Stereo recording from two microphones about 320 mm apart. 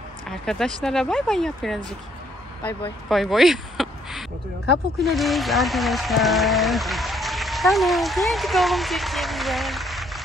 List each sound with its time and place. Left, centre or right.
0.5 s speech: centre